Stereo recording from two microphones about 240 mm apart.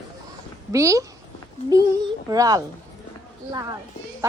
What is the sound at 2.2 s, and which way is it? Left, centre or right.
Speech, centre.